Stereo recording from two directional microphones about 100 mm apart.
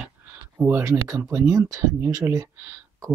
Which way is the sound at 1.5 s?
40° right (ahead or behind).